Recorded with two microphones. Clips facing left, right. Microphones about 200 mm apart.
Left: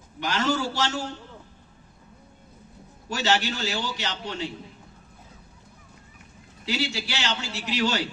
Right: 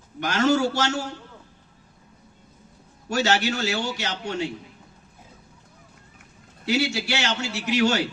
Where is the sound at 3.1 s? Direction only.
50° right (ahead or behind).